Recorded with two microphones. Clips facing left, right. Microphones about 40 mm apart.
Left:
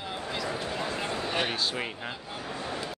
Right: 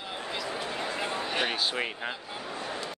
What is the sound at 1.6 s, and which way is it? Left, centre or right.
Speech, centre.